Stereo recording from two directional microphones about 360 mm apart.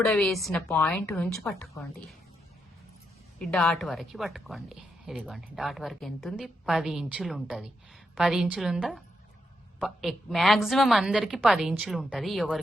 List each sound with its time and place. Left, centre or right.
0.0 s a woman's voice: centre
3.3 s a woman's voice: centre